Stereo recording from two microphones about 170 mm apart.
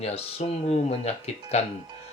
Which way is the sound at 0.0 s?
35° left (ahead or behind).